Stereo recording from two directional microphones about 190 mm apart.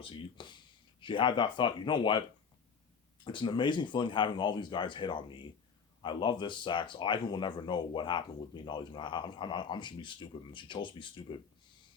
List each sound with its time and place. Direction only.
0.0 s speech: 25° left (ahead or behind)
3.2 s speech: 25° left (ahead or behind)